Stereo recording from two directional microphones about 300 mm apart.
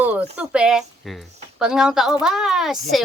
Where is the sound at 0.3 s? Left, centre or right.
Centre.